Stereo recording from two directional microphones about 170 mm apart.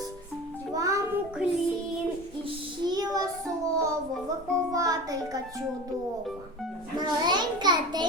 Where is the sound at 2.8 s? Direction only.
25° right (ahead or behind).